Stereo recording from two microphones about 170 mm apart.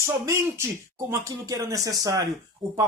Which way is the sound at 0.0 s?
15° right (ahead or behind).